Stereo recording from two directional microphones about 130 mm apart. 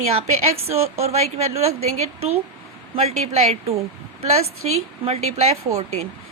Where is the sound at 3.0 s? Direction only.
55° right (ahead or behind).